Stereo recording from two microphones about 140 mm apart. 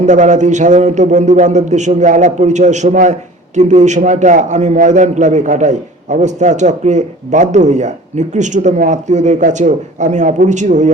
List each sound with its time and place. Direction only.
0.0 s a man's voice: 60° right (ahead or behind)